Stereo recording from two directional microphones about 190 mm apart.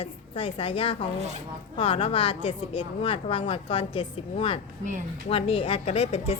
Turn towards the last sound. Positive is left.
turn(degrees=35)  # may be behind; listen again after turning